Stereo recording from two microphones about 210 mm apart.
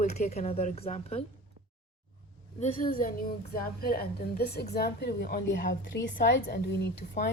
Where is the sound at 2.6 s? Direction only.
40° left (ahead or behind).